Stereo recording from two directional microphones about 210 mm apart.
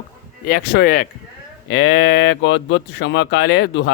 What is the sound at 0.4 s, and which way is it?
Speech, 50° left (ahead or behind).